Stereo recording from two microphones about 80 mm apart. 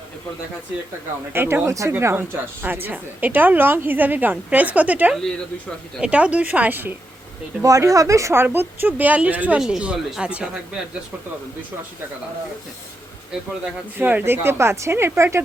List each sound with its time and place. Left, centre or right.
1.3 s speech: right
1.9 s a woman's voice: right
7.6 s a woman's voice: right; by 10.5 s centre
14.0 s speech: right